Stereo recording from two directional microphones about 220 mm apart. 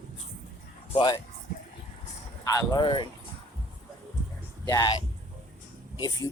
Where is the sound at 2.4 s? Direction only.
15° left (ahead or behind).